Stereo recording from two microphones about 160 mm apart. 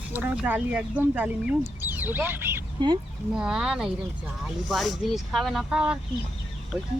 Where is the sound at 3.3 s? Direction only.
5° right (ahead or behind).